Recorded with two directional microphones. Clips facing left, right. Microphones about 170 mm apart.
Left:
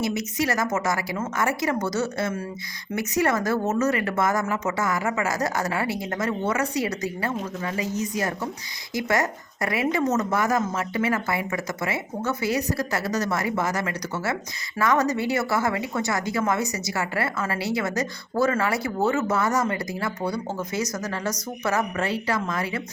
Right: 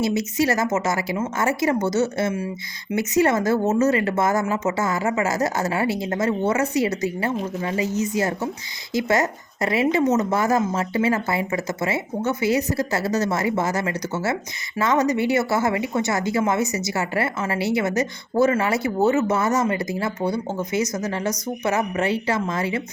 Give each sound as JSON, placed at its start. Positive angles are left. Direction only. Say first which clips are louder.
{"t": 0.0, "sound": "speech", "louder": "right 4 dB", "side_deg": -30}